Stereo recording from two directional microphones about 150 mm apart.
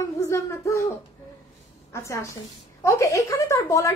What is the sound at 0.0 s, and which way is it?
Speech, 20° left (ahead or behind).